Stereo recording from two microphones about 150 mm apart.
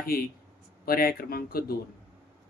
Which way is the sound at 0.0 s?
80° left.